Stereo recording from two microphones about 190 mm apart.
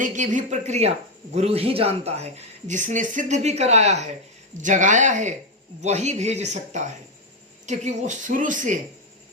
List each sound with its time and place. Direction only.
0.0 s speech: 40° right (ahead or behind)